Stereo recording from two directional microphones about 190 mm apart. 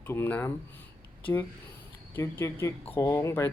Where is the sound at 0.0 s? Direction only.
10° left (ahead or behind).